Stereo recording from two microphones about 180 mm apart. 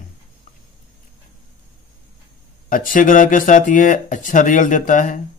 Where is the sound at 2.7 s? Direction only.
50° left (ahead or behind).